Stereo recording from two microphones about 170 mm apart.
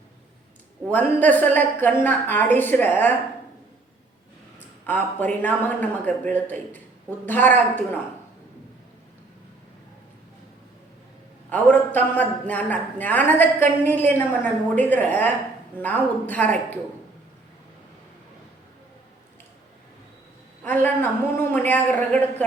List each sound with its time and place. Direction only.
0.9 s a man's voice: 10° left (ahead or behind)
4.9 s a man's voice: 10° left (ahead or behind)
11.4 s a man's voice: 10° left (ahead or behind)
20.7 s a man's voice: 10° left (ahead or behind)